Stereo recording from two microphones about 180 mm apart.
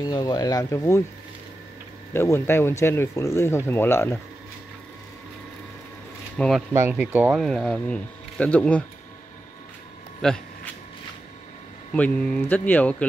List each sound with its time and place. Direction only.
0.0 s speech: 20° left (ahead or behind)
2.1 s speech: 15° left (ahead or behind)
6.3 s speech: 5° left (ahead or behind)
6.7 s speech: 10° right (ahead or behind); by 8.8 s 5° left (ahead or behind)
10.2 s a sound: 5° left (ahead or behind)
11.9 s speech: 5° left (ahead or behind)